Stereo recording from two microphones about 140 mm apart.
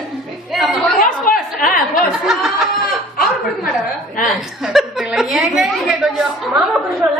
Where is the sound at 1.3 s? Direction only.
90° left.